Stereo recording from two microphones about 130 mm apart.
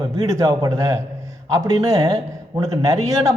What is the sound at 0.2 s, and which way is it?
A man's voice, 25° right (ahead or behind).